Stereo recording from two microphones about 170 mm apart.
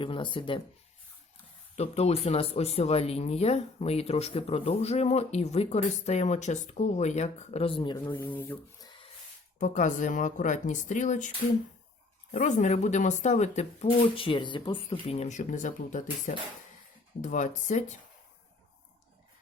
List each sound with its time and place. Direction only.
0.0 s speech: 30° left (ahead or behind)
1.7 s speech: 40° left (ahead or behind)
8.1 s speech: 15° left (ahead or behind)
9.6 s speech: 45° left (ahead or behind)
12.3 s speech: 50° left (ahead or behind)
14.2 s speech: 30° left (ahead or behind); by 17.9 s 45° left (ahead or behind)